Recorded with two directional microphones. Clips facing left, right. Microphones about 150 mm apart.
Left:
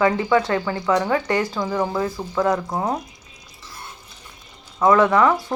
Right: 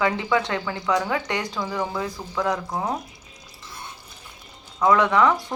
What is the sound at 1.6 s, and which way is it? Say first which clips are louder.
Speech: left 5 dB; 20° left (ahead or behind).